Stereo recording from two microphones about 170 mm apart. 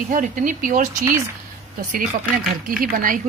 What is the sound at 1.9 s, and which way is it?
A woman's voice, 55° right (ahead or behind).